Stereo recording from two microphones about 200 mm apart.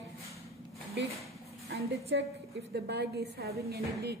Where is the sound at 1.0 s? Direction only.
60° right (ahead or behind).